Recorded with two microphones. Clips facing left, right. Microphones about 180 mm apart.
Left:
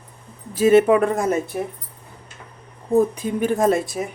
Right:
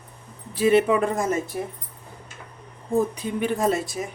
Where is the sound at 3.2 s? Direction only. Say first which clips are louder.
Left 4 dB; 45° left (ahead or behind).